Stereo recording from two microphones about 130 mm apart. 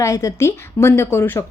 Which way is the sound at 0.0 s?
25° left (ahead or behind).